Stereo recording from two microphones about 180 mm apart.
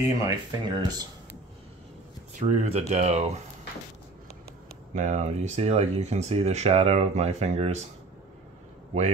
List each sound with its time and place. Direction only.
0.0 s speech: 20° right (ahead or behind)
2.3 s speech: 40° right (ahead or behind)
4.9 s speech: 45° right (ahead or behind)